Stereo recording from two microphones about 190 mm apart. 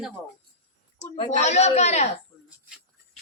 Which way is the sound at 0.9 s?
35° left (ahead or behind).